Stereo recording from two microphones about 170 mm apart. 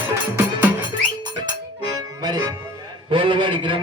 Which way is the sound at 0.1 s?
15° right (ahead or behind).